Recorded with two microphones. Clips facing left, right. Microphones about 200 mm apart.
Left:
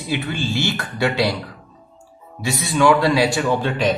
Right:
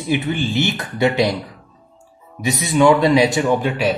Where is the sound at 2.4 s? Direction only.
20° right (ahead or behind).